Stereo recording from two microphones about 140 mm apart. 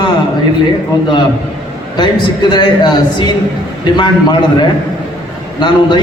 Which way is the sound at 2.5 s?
30° left (ahead or behind).